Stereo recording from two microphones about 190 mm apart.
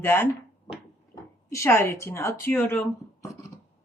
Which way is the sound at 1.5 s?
15° left (ahead or behind).